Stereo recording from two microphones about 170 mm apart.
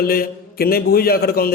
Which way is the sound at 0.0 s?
60° left (ahead or behind).